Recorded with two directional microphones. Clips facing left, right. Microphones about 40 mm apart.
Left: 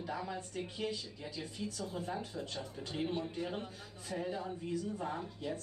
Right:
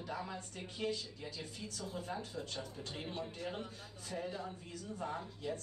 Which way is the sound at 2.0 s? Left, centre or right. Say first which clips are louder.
Left 1 dB; centre.